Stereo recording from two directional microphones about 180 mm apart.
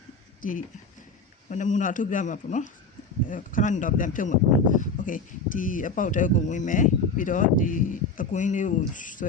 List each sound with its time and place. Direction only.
0.4 s speech: 50° left (ahead or behind)